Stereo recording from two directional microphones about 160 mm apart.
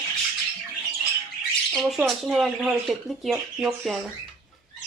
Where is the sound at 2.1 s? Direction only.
Centre (ahead or behind).